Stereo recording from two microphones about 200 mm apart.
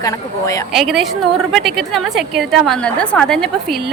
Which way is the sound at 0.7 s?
Centre (ahead or behind).